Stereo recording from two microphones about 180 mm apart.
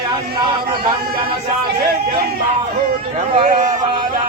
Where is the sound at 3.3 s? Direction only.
45° right (ahead or behind).